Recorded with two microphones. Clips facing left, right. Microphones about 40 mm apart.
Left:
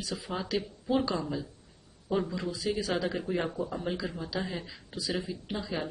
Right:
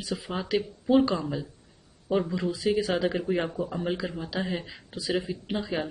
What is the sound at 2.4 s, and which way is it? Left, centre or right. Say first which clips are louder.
Speech: right 6 dB; right.